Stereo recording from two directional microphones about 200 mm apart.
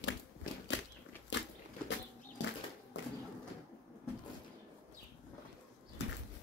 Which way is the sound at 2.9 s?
60° left (ahead or behind).